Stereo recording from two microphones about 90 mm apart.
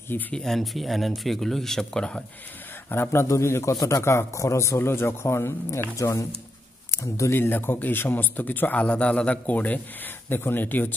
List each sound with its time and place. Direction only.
0.3 s speech: 5° left (ahead or behind)
2.9 s a man's voice: 25° left (ahead or behind)